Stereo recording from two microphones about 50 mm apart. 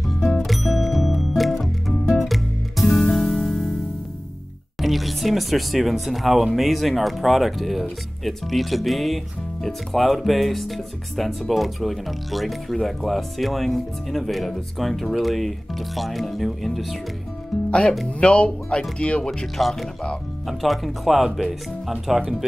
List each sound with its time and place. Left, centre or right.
0.4 s music: centre
4.7 s speech: centre
17.6 s speech: left
19.4 s speech: centre